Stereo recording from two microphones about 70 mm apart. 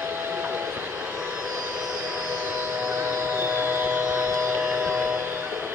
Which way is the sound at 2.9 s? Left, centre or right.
Right.